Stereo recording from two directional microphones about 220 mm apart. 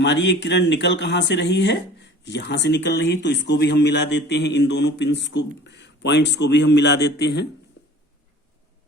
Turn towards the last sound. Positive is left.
turn(degrees=50)  # may be behind; listen again after turning